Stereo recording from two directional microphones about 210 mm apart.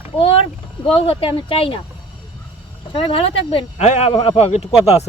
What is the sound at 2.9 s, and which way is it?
Speech, 25° left (ahead or behind).